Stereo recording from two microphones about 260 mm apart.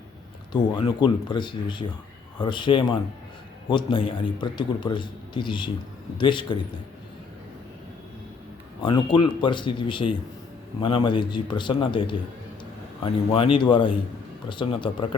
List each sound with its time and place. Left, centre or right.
0.5 s a man's voice: centre
8.8 s a man's voice: centre
13.3 s a man's voice: centre